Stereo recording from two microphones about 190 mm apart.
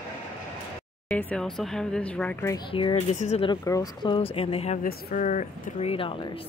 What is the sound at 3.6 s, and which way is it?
Speech, 20° left (ahead or behind).